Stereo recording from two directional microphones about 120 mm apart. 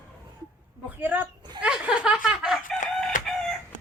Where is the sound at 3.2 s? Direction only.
90° left.